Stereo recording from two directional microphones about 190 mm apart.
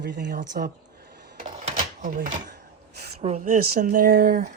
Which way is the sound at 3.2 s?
40° right (ahead or behind).